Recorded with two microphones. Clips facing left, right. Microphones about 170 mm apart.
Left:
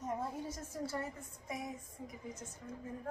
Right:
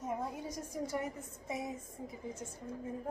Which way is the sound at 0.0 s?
10° right (ahead or behind).